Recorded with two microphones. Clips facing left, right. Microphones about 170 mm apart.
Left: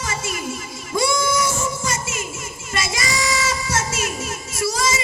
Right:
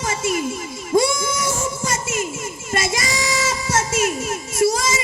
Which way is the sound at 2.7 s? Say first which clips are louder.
Right 2 dB; 50° right (ahead or behind).